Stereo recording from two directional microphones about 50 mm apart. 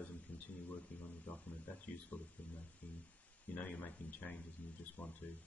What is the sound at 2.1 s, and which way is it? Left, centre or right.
Speech, left.